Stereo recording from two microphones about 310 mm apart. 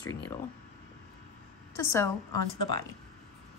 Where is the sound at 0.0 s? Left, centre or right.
Left.